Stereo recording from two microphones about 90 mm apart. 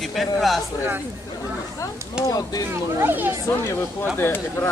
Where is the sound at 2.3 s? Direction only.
45° left (ahead or behind).